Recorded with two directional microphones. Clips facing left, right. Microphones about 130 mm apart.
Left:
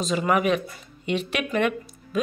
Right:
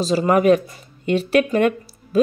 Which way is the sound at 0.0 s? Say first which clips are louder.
Right 6 dB; 35° right (ahead or behind).